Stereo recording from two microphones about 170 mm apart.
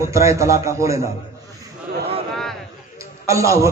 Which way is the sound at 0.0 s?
15° right (ahead or behind).